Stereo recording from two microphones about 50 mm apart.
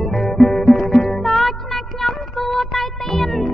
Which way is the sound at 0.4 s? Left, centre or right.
Centre.